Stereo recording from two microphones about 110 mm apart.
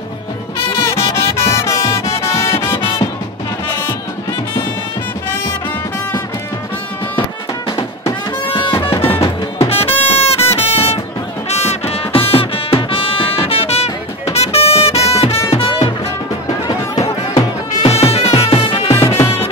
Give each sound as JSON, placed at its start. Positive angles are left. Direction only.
{"t": 0.8, "sound": "music", "side_deg": 25}
{"t": 8.5, "sound": "music", "side_deg": 50}
{"t": 9.0, "sound": "music", "side_deg": 25}
{"t": 9.7, "sound": "music", "side_deg": 60}
{"t": 16.4, "sound": "music", "side_deg": 35}
{"t": 17.8, "sound": "music", "side_deg": 70}
{"t": 18.9, "sound": "music", "side_deg": 25}
{"t": 19.2, "sound": "music", "side_deg": 60}